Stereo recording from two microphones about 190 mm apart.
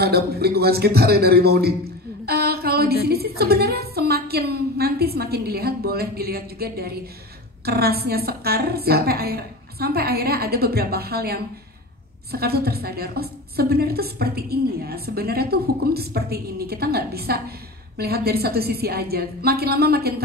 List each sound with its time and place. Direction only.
0.0 s a woman's voice: 55° right (ahead or behind)
2.2 s a sound: 55° right (ahead or behind)
3.1 s a woman's voice: 55° right (ahead or behind)